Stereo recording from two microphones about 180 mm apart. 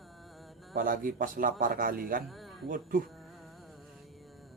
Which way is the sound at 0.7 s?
50° right (ahead or behind).